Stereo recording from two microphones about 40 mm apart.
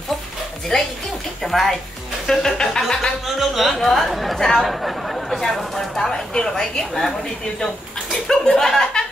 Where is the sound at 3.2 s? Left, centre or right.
Centre.